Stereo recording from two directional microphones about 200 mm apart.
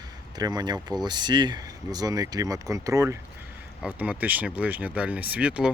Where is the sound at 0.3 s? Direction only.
20° right (ahead or behind).